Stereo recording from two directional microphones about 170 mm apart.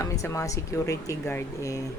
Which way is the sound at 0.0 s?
20° left (ahead or behind).